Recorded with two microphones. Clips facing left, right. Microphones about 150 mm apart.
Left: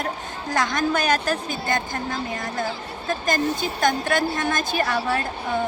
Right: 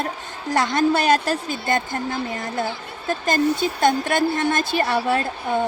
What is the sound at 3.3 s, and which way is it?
A woman's voice, 30° right (ahead or behind).